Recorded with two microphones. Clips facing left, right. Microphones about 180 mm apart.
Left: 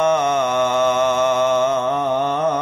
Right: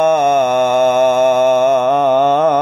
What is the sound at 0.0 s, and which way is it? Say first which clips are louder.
Mantra: right 5 dB; 60° right (ahead or behind).